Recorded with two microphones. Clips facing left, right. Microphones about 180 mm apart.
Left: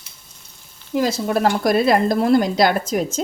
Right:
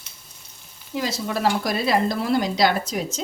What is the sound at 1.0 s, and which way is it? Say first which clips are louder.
Speech: left 6 dB; 50° left (ahead or behind).